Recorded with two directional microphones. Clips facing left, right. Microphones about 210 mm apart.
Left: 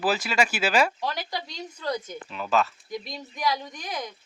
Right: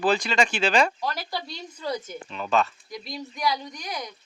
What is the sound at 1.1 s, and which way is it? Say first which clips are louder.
Speech: even; 15° left (ahead or behind).